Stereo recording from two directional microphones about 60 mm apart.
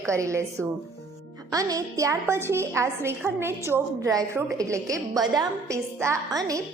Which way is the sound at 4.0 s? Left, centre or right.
Right.